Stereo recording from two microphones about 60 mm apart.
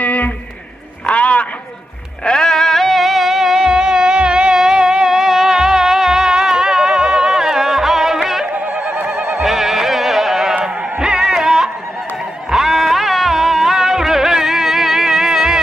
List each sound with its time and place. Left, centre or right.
0.0 s music: left
1.0 s a sound: left
2.2 s music: centre
8.5 s neigh: right
9.4 s music: centre
10.5 s a sound: centre
12.4 s music: centre